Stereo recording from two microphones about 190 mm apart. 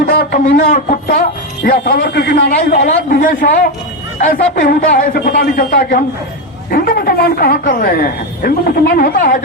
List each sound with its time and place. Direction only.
0.3 s speech: 45° left (ahead or behind)